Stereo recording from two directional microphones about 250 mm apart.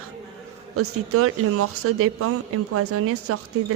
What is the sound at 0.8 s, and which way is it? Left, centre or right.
A woman's voice, right.